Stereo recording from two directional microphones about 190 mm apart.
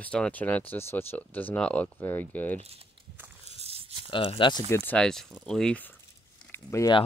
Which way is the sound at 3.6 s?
30° right (ahead or behind).